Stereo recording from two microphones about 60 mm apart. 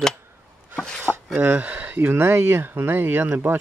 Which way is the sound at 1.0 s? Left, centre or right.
Right.